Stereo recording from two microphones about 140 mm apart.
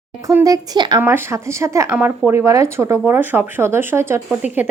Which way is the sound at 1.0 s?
15° right (ahead or behind).